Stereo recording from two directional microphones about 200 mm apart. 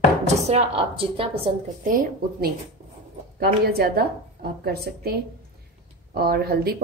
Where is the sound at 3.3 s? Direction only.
50° right (ahead or behind).